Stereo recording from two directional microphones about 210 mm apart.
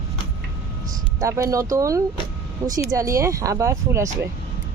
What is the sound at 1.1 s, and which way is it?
Speech, 15° right (ahead or behind).